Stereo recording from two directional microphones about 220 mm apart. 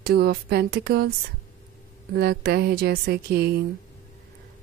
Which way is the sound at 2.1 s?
45° right (ahead or behind).